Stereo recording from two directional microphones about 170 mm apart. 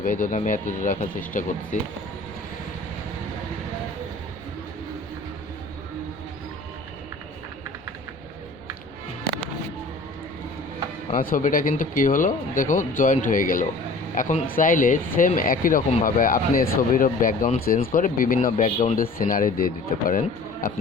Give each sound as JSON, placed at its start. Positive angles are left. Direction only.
{"t": 0.0, "sound": "speech", "side_deg": 50}
{"t": 11.1, "sound": "speech", "side_deg": 55}